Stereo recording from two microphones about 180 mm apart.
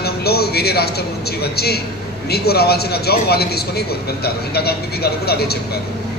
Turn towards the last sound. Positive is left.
turn(degrees=60)  # may be behind; listen again after turning